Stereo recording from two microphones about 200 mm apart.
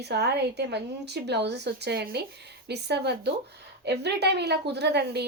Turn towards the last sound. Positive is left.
turn(degrees=-55)  # may be behind; listen again after turning